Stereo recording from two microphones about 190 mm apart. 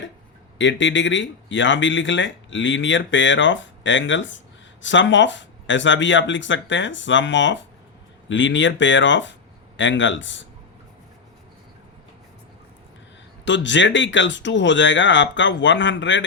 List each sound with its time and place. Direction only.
0.6 s speech: 75° left (ahead or behind)
13.4 s speech: 75° left (ahead or behind)